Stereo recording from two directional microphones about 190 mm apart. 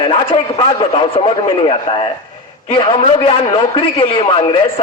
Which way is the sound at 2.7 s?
30° left (ahead or behind).